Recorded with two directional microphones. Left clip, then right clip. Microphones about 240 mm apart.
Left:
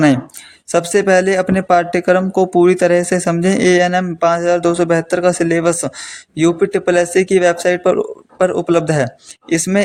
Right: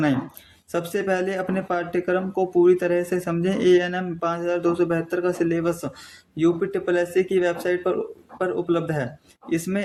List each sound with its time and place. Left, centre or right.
0.7 s speech: left